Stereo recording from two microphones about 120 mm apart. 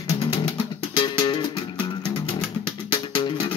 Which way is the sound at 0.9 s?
40° left (ahead or behind).